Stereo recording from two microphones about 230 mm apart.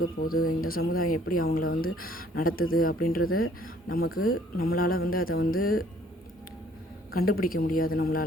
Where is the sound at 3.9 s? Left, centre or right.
Left.